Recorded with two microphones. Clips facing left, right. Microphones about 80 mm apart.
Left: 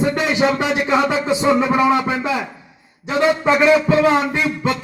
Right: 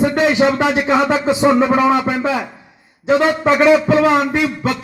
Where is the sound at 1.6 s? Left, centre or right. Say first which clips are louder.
Right 2 dB; right.